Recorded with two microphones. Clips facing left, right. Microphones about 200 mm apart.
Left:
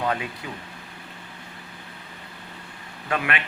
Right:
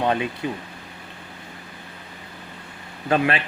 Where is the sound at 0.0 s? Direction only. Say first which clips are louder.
Right 4 dB; 25° right (ahead or behind).